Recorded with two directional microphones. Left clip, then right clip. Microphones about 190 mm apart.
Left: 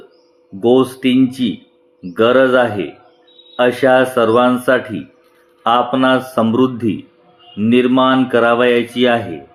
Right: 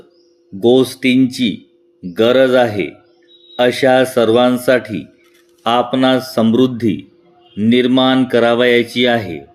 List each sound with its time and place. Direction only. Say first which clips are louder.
0.8 s speech: right 1 dB; 40° right (ahead or behind)